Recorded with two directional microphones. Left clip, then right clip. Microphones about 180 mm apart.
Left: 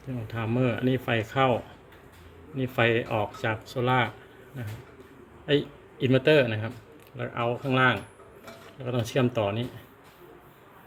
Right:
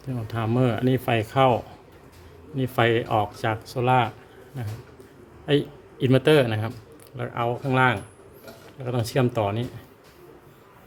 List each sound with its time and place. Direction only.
0.0 s speech: 15° right (ahead or behind)
5.5 s speech: 15° right (ahead or behind)
7.2 s speech: 5° right (ahead or behind)